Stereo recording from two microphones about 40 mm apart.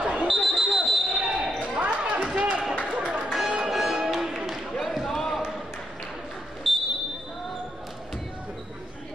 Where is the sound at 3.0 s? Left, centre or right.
Right.